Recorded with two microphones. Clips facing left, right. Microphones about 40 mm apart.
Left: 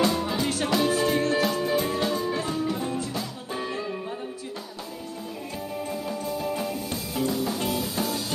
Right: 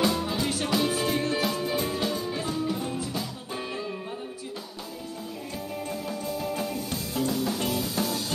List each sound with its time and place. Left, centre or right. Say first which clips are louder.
0.0 s music: left 2 dB; centre
5.9 s music: left 2 dB; centre